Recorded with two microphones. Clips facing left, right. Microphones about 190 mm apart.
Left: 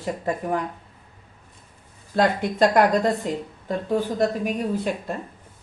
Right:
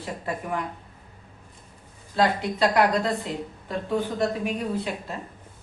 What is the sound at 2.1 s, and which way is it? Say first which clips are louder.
Speech: left 2 dB; 50° left (ahead or behind).